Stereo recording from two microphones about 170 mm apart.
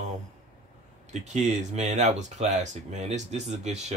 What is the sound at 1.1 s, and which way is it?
Speech, 45° right (ahead or behind).